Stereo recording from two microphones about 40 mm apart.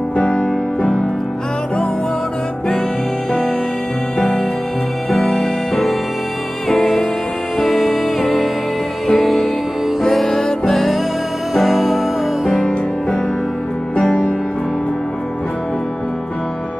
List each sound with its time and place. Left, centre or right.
0.2 s music: left
5.1 s music: centre
12.5 s music: centre